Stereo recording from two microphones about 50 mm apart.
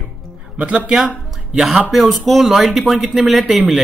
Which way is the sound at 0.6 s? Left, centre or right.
Centre.